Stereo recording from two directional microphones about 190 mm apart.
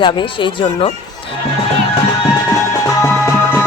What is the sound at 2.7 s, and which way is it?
Music, 15° left (ahead or behind).